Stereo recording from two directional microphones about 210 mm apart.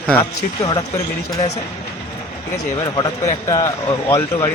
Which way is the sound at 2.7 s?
15° left (ahead or behind).